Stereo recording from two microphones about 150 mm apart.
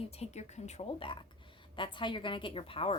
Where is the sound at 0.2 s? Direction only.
50° left (ahead or behind).